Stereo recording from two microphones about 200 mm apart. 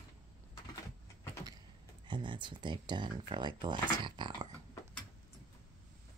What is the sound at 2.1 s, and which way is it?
Speech, 25° right (ahead or behind).